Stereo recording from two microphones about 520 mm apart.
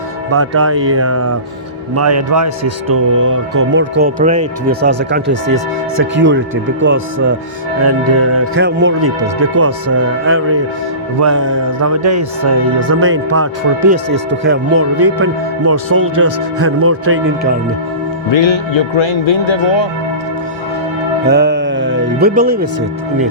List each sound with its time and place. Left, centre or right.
0.3 s speech: right
12.9 s speech: right
18.3 s speech: left
21.2 s music: centre